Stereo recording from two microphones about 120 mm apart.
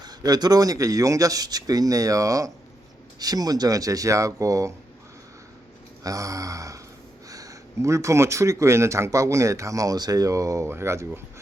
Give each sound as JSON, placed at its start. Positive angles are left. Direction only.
{"t": 0.0, "sound": "speech", "side_deg": -35}
{"t": 6.0, "sound": "a sound", "side_deg": -30}
{"t": 7.3, "sound": "speech", "side_deg": -30}